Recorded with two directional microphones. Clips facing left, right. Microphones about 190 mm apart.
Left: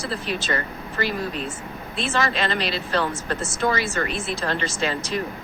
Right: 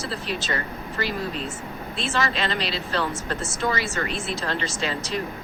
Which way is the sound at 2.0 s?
55° left (ahead or behind).